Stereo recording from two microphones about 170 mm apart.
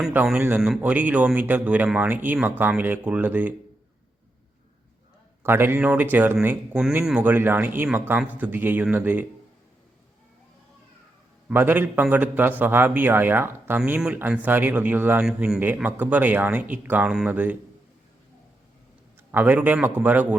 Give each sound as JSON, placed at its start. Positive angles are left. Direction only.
{"t": 0.1, "sound": "a man's voice", "side_deg": -10}
{"t": 5.4, "sound": "a man's voice", "side_deg": -15}
{"t": 11.4, "sound": "a man's voice", "side_deg": -10}
{"t": 19.3, "sound": "a man's voice", "side_deg": -10}